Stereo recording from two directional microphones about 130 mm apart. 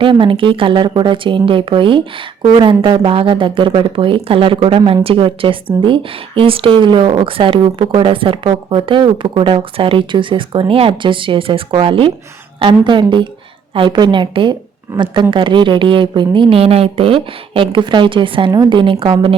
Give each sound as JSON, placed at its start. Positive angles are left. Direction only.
{"t": 0.0, "sound": "a woman's voice", "side_deg": -40}